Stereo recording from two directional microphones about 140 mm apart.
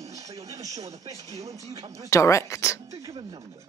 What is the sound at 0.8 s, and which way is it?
Speech, 50° right (ahead or behind).